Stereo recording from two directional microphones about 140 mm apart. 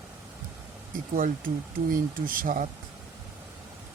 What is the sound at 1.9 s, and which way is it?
Speech, 80° right.